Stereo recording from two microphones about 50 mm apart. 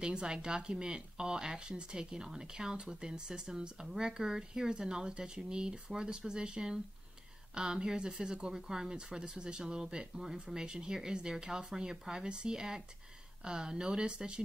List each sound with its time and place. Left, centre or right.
0.0 s speech: centre